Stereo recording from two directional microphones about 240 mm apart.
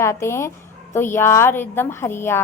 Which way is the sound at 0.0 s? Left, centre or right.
Centre.